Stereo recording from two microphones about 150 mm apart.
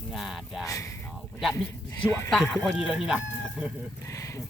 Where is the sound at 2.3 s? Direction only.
5° left (ahead or behind).